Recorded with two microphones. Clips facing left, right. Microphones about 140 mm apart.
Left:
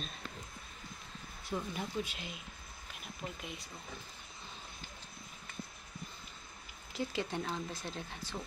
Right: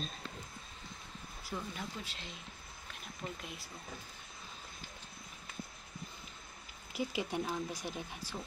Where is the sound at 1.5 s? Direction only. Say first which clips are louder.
Left 5 dB; 15° left (ahead or behind).